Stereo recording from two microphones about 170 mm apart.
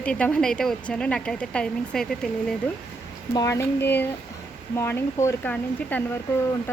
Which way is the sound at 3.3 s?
20° left (ahead or behind).